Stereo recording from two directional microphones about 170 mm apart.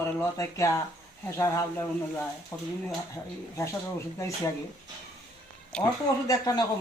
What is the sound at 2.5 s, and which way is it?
Speech, 15° left (ahead or behind).